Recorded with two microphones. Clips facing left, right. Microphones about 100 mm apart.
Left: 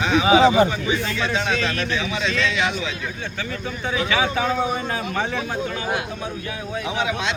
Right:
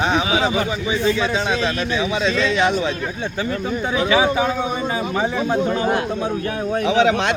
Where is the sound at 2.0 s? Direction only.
30° right (ahead or behind).